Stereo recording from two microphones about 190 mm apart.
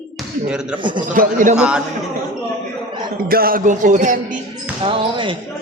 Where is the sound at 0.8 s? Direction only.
25° right (ahead or behind).